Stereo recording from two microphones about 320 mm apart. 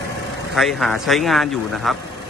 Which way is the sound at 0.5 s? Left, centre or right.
Centre.